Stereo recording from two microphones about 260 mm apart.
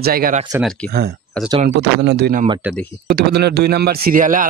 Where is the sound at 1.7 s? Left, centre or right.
Right.